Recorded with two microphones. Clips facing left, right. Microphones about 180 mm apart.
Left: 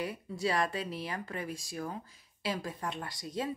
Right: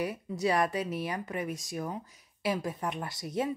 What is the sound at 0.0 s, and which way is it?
Speech, 20° right (ahead or behind).